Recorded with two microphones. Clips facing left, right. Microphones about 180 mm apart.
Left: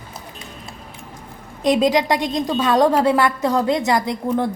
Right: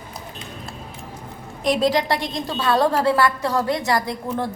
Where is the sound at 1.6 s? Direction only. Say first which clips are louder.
Left 3 dB; 20° left (ahead or behind).